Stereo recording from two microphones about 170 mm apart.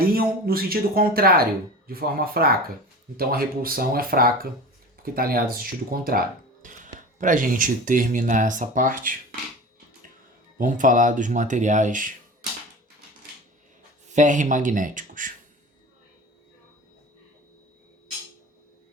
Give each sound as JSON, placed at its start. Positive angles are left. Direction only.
{"t": 0.1, "sound": "speech", "side_deg": -60}
{"t": 10.6, "sound": "speech", "side_deg": -50}
{"t": 14.1, "sound": "speech", "side_deg": -45}